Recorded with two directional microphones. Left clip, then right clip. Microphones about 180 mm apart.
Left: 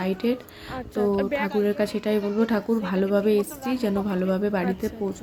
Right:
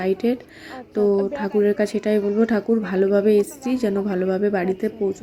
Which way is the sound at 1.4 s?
15° right (ahead or behind).